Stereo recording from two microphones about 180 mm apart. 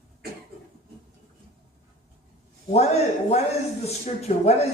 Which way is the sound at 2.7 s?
35° left (ahead or behind).